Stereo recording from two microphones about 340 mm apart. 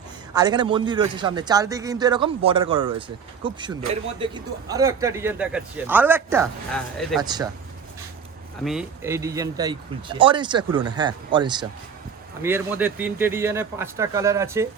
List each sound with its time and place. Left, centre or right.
0.3 s a man's voice: centre
8.6 s a man's voice: centre